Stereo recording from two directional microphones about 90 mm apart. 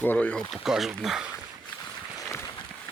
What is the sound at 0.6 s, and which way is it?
Speech, 5° right (ahead or behind).